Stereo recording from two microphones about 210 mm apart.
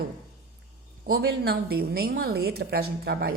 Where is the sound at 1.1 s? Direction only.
50° right (ahead or behind).